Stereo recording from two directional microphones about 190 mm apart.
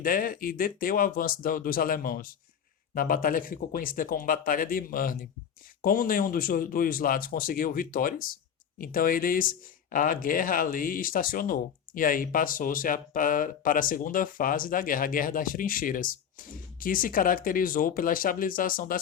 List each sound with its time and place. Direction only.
0.0 s speech: 50° left (ahead or behind)